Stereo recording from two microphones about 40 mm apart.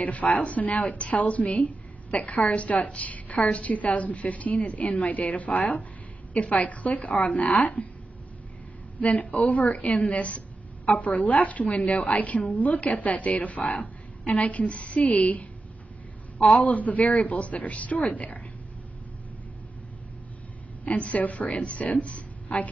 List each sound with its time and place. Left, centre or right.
0.0 s a woman's voice: left
9.0 s a woman's voice: left
9.8 s a woman's voice: left
16.6 s a woman's voice: left
20.8 s a woman's voice: left